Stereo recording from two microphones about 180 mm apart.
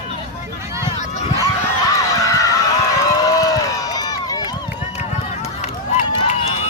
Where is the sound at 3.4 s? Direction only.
20° left (ahead or behind).